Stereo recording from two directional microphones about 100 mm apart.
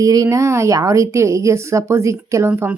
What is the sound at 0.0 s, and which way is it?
Speech, 35° right (ahead or behind).